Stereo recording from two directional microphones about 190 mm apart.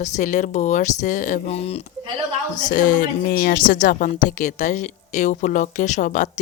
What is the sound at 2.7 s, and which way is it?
Speech, 45° left (ahead or behind).